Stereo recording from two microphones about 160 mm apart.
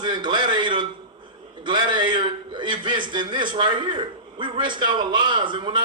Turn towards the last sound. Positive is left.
turn(degrees=-30)  # may be behind; listen again after turning